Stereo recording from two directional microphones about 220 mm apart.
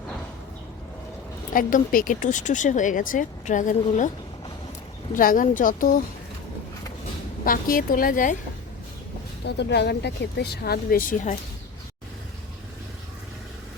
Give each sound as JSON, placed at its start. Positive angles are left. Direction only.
{"t": 1.5, "sound": "speech", "side_deg": 40}
{"t": 5.1, "sound": "speech", "side_deg": 40}
{"t": 7.4, "sound": "speech", "side_deg": 40}
{"t": 9.5, "sound": "speech", "side_deg": 50}